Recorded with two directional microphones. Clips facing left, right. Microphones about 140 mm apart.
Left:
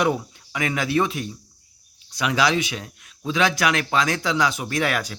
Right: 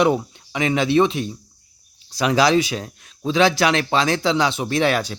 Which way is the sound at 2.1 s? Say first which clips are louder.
Right 5 dB; 35° right (ahead or behind).